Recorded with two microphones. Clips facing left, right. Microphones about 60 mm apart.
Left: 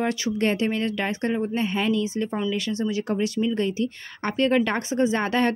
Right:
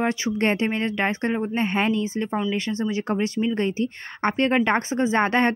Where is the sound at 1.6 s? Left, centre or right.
Right.